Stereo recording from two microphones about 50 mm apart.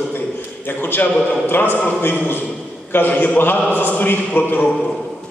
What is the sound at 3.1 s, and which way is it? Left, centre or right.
A man's voice, left.